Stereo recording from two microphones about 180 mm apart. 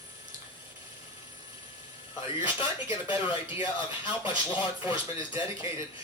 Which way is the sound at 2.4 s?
25° left (ahead or behind).